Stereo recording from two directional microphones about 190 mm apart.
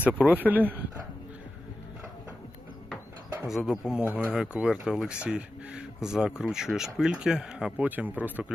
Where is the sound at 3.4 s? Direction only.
5° right (ahead or behind).